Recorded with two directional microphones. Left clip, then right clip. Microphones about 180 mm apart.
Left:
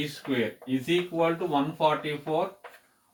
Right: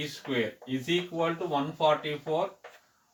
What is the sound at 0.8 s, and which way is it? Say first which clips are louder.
Speech: left 3 dB; 10° left (ahead or behind).